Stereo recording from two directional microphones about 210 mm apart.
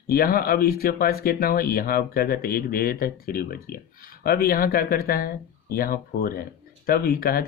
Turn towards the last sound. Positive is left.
turn(degrees=45)  # may be behind; listen again after turning